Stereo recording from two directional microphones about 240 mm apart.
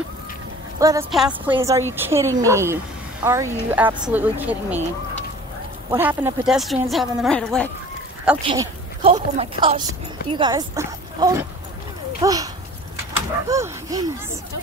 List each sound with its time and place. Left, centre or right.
0.7 s a woman's voice: centre
1.1 s a woman's voice: centre
1.5 s speech: centre
5.9 s a woman's voice: centre
8.5 s a woman's voice: centre
13.5 s a sound: centre